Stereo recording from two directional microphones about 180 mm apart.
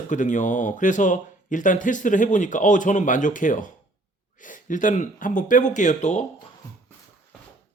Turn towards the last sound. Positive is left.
turn(degrees=40)  # may be behind; listen again after turning